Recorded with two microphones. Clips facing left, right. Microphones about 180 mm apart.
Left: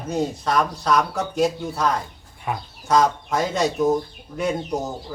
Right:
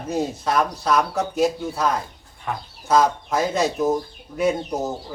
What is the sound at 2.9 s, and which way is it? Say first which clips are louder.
Speech: even; centre (ahead or behind).